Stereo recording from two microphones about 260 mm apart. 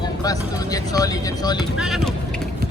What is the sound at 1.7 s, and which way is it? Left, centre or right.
Speech, centre.